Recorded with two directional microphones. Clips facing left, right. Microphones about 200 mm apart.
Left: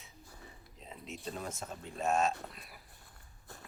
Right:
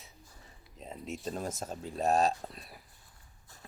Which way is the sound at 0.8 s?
45° right (ahead or behind).